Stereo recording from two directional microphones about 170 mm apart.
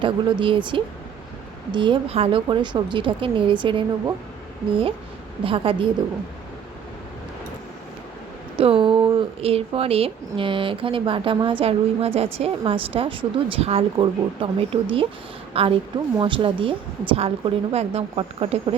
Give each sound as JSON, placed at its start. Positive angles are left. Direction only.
{"t": 0.0, "sound": "speech", "side_deg": -30}
{"t": 8.6, "sound": "speech", "side_deg": -30}